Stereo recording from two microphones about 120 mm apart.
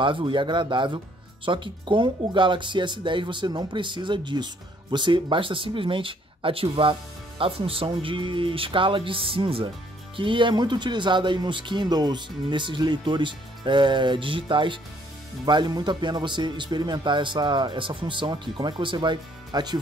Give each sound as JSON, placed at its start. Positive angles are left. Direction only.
{"t": 0.0, "sound": "speech", "side_deg": -45}